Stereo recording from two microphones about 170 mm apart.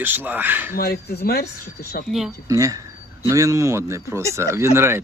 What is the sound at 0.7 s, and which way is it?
Speech, 60° left (ahead or behind).